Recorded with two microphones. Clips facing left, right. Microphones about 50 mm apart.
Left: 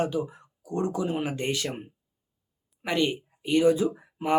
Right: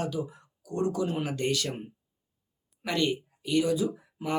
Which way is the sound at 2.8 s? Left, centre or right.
Left.